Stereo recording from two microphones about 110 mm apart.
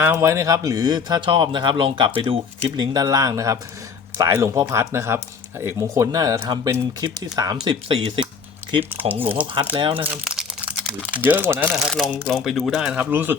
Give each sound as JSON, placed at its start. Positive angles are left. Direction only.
{"t": 0.0, "sound": "speech", "side_deg": -20}
{"t": 1.3, "sound": "speech", "side_deg": -50}
{"t": 2.9, "sound": "speech", "side_deg": -35}
{"t": 8.8, "sound": "speech", "side_deg": -20}
{"t": 9.8, "sound": "speech", "side_deg": -55}
{"t": 10.2, "sound": "crumpling", "side_deg": -5}
{"t": 11.1, "sound": "speech", "side_deg": -15}
{"t": 11.7, "sound": "speech", "side_deg": 0}